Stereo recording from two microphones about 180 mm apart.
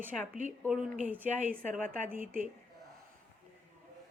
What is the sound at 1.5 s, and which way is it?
Speech, 45° right (ahead or behind).